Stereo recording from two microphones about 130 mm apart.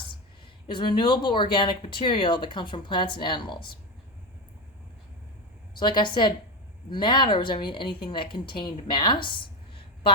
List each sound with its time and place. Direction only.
0.7 s speech: 40° left (ahead or behind)
5.8 s speech: 35° left (ahead or behind)
8.9 s a sound: 35° left (ahead or behind)